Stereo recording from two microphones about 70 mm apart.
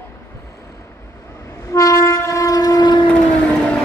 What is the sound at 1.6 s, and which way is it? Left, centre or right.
Train, left.